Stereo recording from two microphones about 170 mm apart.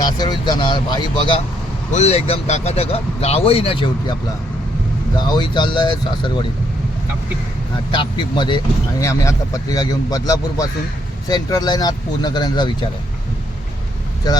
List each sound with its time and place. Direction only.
0.0 s speech: 25° left (ahead or behind)
1.9 s speech: 40° left (ahead or behind)
5.1 s speech: 25° left (ahead or behind)
7.9 s speech: 30° left (ahead or behind)